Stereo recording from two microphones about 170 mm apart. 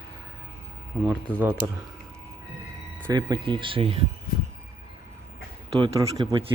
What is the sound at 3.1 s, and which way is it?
Speech, 25° right (ahead or behind).